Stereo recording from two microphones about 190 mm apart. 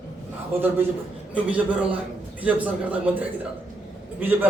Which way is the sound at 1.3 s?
5° right (ahead or behind).